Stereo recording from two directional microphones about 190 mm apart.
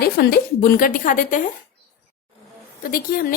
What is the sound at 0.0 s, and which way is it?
A woman's voice, 55° left (ahead or behind).